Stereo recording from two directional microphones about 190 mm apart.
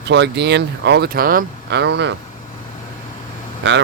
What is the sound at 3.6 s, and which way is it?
Speech, 70° right (ahead or behind).